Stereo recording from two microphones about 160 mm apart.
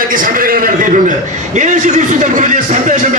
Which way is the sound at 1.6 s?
50° right (ahead or behind).